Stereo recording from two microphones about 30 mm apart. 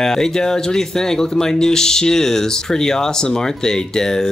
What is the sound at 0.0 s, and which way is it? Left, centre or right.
Speech, centre.